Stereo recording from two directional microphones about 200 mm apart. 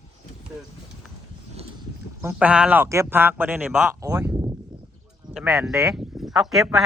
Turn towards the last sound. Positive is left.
turn(degrees=0)  # may be behind; listen again after turning